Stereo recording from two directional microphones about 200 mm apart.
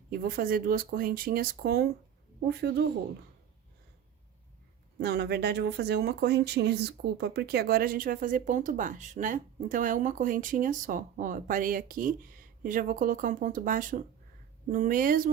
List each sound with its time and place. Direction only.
0.1 s speech: 45° right (ahead or behind)
4.9 s speech: 55° right (ahead or behind)